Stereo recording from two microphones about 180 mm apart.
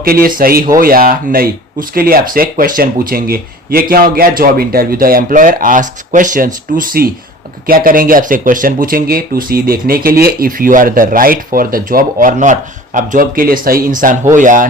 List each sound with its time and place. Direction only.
0.0 s speech: 55° right (ahead or behind)